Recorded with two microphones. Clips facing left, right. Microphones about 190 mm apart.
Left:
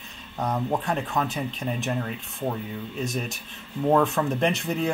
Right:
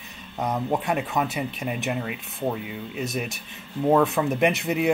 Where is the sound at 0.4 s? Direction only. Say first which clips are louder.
Right 1 dB; 10° right (ahead or behind).